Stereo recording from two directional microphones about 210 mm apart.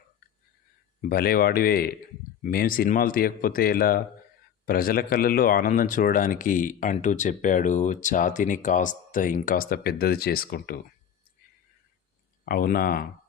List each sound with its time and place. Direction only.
1.0 s speech: 45° left (ahead or behind)
12.5 s speech: 45° left (ahead or behind)